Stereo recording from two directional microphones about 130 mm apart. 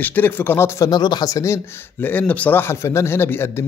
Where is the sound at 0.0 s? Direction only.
15° left (ahead or behind).